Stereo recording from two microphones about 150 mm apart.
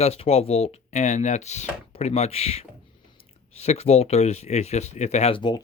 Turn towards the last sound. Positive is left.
turn(degrees=30)  # may be behind; listen again after turning